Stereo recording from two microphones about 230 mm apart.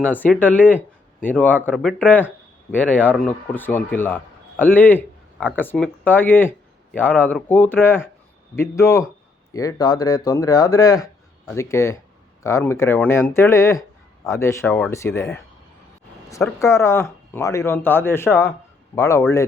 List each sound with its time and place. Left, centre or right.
0.0 s a man's voice: centre